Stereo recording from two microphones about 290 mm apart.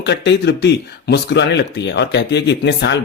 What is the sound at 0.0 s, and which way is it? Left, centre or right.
Speech, left.